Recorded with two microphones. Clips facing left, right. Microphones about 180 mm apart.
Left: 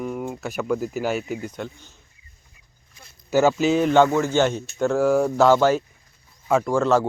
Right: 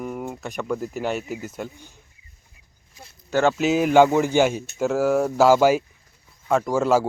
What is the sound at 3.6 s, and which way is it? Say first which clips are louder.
Speech: right 1 dB; 5° right (ahead or behind).